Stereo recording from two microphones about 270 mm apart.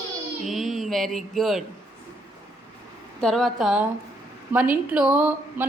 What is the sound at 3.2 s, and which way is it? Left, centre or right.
Speech, centre.